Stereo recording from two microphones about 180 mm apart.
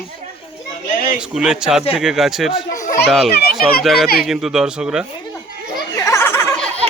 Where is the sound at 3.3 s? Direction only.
60° left (ahead or behind).